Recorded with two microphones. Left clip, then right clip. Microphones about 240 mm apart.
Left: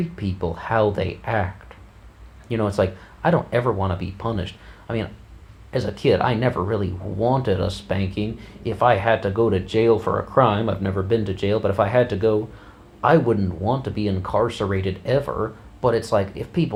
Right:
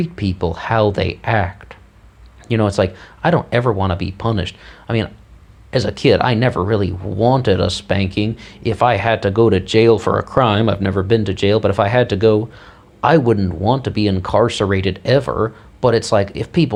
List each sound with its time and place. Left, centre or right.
0.0 s speech: right
2.5 s speech: right